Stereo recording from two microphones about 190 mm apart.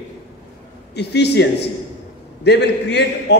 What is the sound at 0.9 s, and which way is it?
A man's voice, 60° left (ahead or behind).